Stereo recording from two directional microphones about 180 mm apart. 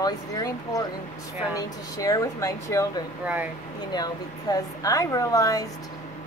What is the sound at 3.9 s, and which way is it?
A woman's voice, 20° left (ahead or behind).